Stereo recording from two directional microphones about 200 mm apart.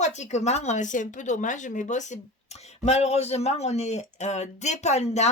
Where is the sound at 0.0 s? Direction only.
35° left (ahead or behind).